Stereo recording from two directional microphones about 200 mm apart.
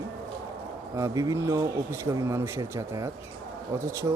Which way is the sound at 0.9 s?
15° right (ahead or behind).